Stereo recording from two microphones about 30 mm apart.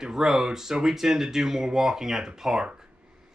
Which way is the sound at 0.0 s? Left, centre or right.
Centre.